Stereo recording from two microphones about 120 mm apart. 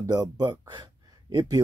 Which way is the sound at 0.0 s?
35° right (ahead or behind).